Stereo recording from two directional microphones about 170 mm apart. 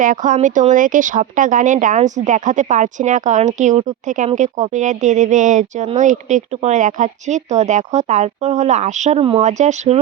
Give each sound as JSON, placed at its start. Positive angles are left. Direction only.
{"t": 0.0, "sound": "speech", "side_deg": -50}